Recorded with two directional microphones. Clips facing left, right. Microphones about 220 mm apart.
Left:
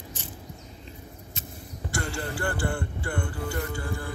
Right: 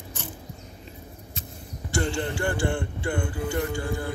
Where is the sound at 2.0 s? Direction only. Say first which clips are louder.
Right 5 dB; 20° right (ahead or behind).